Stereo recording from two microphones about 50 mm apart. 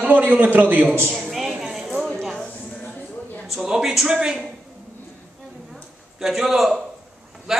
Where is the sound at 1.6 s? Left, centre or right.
Centre.